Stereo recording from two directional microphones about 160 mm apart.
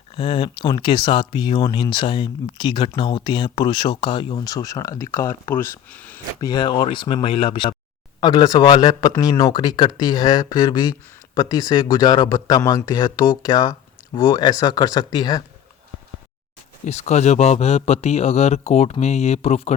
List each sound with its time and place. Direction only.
0.2 s speech: 35° left (ahead or behind); by 6.1 s 10° left (ahead or behind)
6.4 s speech: 30° left (ahead or behind)
16.8 s speech: 45° left (ahead or behind)